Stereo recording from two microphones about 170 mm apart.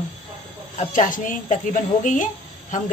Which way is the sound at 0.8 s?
50° left (ahead or behind).